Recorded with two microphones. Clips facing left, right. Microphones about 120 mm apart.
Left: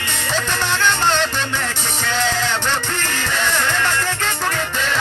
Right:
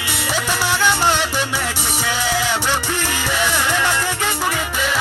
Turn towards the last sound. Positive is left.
turn(degrees=-10)  # may be behind; listen again after turning